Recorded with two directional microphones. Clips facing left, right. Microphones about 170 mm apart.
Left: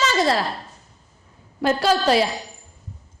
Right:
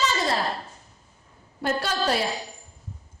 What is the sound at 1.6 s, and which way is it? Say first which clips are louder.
Speech: left 7 dB; 90° left.